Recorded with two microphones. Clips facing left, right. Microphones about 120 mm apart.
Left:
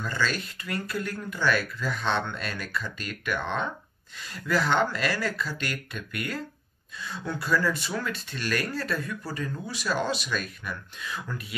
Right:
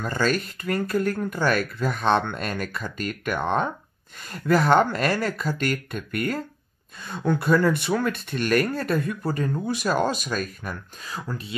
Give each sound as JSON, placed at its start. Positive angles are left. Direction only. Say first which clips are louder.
{"t": 0.0, "sound": "speech", "louder": "right 6 dB", "side_deg": -50}